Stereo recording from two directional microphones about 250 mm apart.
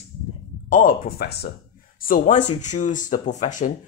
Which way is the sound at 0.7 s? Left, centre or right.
Left.